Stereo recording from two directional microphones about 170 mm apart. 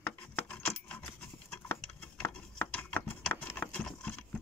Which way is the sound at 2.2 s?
10° left (ahead or behind).